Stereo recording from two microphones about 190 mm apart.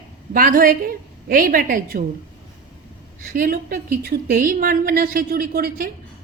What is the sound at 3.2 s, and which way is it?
A woman's voice, 50° right (ahead or behind).